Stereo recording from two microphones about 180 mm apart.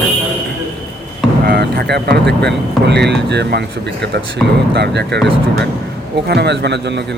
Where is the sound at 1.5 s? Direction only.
65° right (ahead or behind).